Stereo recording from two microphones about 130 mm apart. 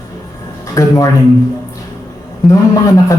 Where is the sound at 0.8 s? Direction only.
25° left (ahead or behind).